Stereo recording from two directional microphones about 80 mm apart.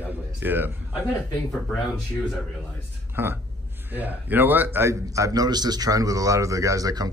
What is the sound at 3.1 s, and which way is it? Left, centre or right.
A man's voice, right.